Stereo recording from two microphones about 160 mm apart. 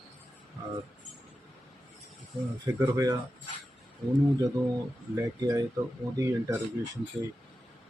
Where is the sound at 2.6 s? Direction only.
20° right (ahead or behind).